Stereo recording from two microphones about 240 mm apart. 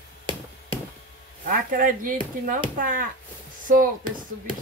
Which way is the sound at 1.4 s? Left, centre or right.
Right.